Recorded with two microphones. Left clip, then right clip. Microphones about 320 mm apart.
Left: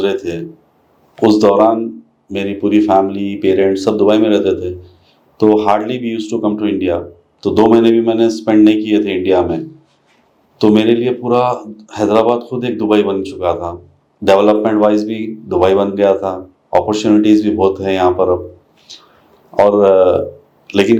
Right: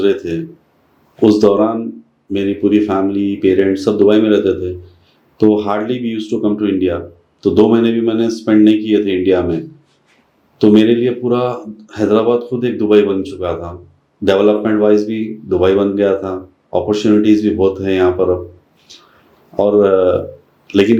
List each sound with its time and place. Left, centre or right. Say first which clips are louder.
0.0 s speech: right 2 dB; left
10.6 s speech: right 1 dB; left
18.9 s a sound: left 4 dB; left
19.5 s speech: left 2 dB; left